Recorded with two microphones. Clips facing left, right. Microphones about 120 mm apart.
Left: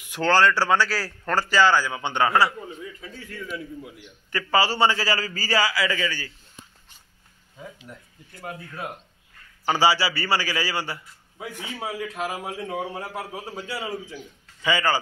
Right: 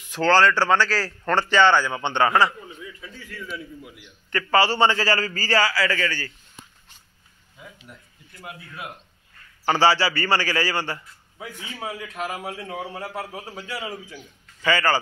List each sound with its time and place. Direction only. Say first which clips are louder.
0.0 s a man's voice: right 2 dB; 15° left (ahead or behind)
2.8 s a man's voice: left 2 dB; 45° left (ahead or behind)
3.5 s a man's voice: left 2 dB; 25° left (ahead or behind)
4.3 s a man's voice: right 2 dB; 10° left (ahead or behind)
8.3 s a man's voice: left 4 dB; 35° left (ahead or behind)
9.7 s a man's voice: right 2 dB; 10° left (ahead or behind)